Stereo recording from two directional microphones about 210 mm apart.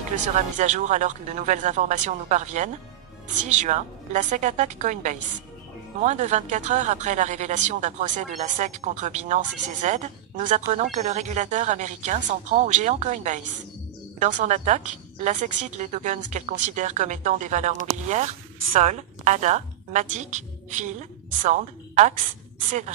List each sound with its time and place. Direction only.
0.1 s a woman's voice: 35° right (ahead or behind)